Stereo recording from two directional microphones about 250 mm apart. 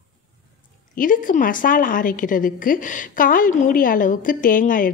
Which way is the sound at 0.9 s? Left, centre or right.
Left.